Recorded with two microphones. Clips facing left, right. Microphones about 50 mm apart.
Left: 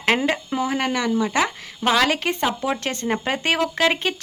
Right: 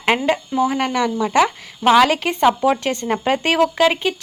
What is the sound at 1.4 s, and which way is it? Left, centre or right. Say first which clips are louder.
Speech: right 5 dB; centre.